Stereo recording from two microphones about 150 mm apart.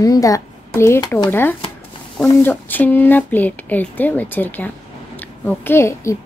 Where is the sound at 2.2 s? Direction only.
15° left (ahead or behind).